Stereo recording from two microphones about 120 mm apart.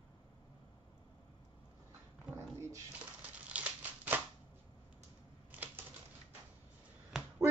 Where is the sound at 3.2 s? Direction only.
10° right (ahead or behind).